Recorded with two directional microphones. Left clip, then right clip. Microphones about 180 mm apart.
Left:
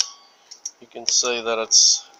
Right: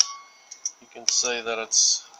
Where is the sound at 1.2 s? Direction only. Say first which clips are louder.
Left 4 dB; 30° left (ahead or behind).